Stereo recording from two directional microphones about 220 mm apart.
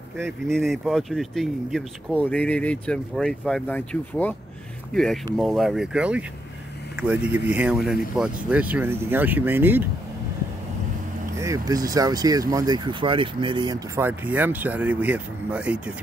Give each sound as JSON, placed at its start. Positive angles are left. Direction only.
{"t": 0.5, "sound": "speech", "side_deg": 0}
{"t": 11.3, "sound": "speech", "side_deg": -15}